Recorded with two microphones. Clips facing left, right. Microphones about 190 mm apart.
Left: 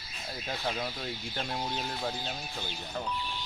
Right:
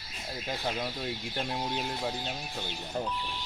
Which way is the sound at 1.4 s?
15° right (ahead or behind).